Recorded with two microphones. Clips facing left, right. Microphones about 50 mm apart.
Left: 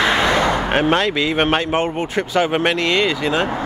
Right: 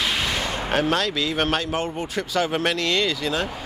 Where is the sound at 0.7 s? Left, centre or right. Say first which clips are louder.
Left 2 dB; left.